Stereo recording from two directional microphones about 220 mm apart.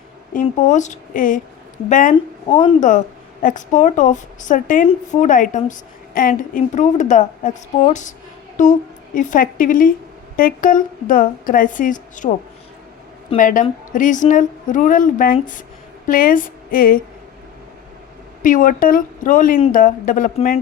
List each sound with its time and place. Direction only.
0.4 s a woman's voice: 35° left (ahead or behind)
2.1 s a woman's voice: 25° left (ahead or behind)
9.1 s a woman's voice: 35° left (ahead or behind)
13.3 s a woman's voice: 35° left (ahead or behind)
18.4 s a woman's voice: 40° left (ahead or behind)